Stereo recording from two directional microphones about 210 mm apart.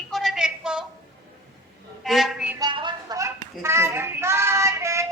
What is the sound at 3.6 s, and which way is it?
Child singing, 15° right (ahead or behind).